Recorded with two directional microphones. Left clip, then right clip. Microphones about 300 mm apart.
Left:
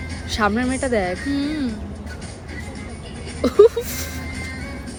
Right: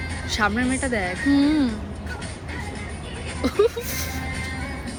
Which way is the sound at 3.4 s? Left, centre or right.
Centre.